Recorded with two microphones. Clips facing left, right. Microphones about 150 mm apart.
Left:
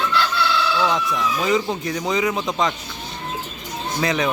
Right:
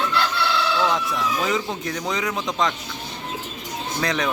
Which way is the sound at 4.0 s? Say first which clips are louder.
Left 3 dB; 5° left (ahead or behind).